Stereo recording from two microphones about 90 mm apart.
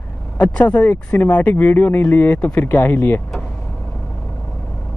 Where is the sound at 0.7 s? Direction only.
25° left (ahead or behind).